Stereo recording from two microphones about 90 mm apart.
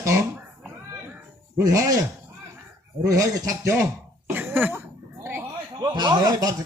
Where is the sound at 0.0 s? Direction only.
35° right (ahead or behind).